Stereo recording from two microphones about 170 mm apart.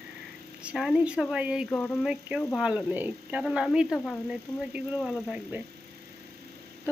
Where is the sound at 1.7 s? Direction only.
5° left (ahead or behind).